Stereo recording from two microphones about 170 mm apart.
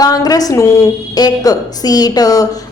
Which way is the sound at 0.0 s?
20° left (ahead or behind).